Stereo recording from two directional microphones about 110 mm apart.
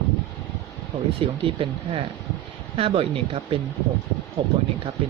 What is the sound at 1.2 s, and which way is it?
Speech, 55° right (ahead or behind).